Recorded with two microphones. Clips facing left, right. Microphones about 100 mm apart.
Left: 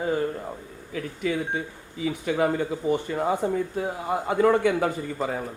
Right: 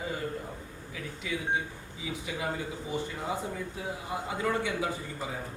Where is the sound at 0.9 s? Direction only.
50° left (ahead or behind).